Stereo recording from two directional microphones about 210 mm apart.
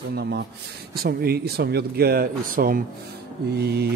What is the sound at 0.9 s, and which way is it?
Speech, 45° right (ahead or behind).